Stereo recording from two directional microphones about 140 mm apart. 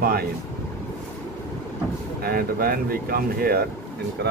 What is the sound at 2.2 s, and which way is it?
Speech, 90° right.